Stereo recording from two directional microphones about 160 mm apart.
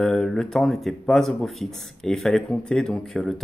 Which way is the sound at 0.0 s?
5° left (ahead or behind).